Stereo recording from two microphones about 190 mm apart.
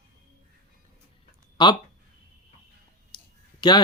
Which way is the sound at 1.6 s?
25° left (ahead or behind).